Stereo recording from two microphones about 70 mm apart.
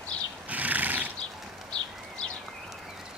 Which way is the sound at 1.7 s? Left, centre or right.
Centre.